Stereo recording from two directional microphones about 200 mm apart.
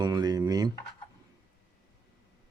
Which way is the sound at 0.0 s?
20° right (ahead or behind).